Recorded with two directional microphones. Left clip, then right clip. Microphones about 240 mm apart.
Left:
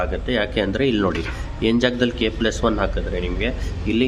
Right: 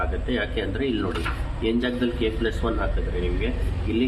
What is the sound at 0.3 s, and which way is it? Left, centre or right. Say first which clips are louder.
Speech: left 7 dB; left.